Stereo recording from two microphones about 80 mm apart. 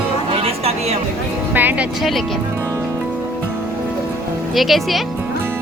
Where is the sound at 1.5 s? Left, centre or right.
Right.